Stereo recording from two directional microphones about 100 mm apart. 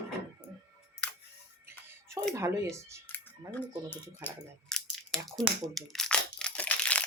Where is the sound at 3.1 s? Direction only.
20° left (ahead or behind).